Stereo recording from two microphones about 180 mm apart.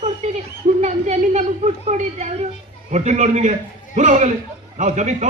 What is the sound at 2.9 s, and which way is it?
A man's voice, 40° right (ahead or behind).